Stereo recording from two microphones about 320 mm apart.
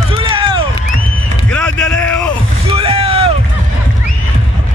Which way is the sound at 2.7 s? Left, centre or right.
Centre.